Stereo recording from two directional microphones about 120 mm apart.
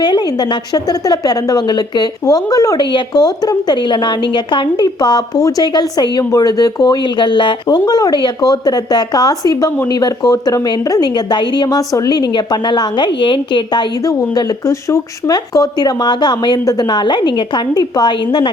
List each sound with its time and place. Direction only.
0.7 s a woman's voice: 30° left (ahead or behind)
14.2 s a woman's voice: 25° left (ahead or behind)